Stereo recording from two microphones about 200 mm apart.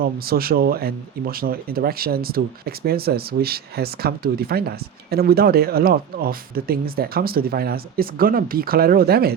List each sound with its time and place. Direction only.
0.0 s speech: 50° right (ahead or behind)